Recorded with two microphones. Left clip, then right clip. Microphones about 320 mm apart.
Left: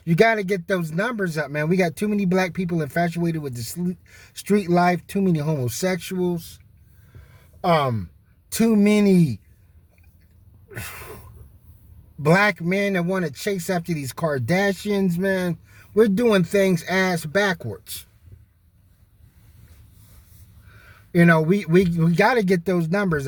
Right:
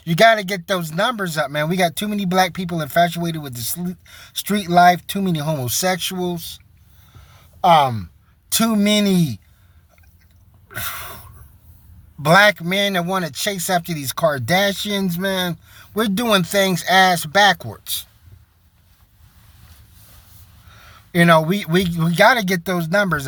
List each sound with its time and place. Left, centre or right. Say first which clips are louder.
0.0 s speech: right 5 dB; centre
7.6 s speech: right 7 dB; right
8.4 s speech: right 1 dB; centre
10.7 s a sound: right 7 dB; centre
12.3 s speech: right 6 dB; centre
21.1 s speech: right 4 dB; centre